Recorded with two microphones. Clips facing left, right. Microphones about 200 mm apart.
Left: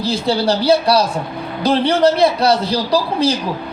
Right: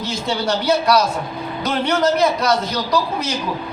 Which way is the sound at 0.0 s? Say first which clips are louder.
Left 5 dB; 35° left (ahead or behind).